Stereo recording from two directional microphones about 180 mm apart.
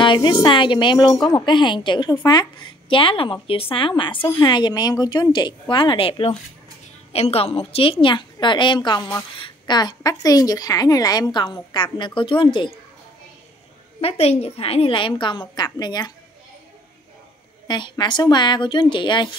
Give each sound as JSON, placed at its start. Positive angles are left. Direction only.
{"t": 0.0, "sound": "a woman's voice", "side_deg": 25}
{"t": 14.0, "sound": "a woman's voice", "side_deg": 35}
{"t": 17.6, "sound": "a woman's voice", "side_deg": 25}